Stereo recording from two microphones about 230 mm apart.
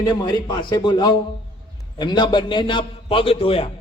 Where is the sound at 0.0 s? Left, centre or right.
Centre.